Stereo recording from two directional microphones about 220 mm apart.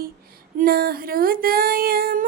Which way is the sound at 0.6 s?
40° right (ahead or behind).